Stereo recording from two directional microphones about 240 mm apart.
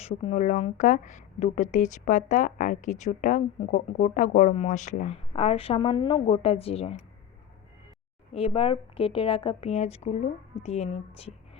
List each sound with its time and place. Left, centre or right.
0.0 s a woman's voice: left
8.3 s speech: left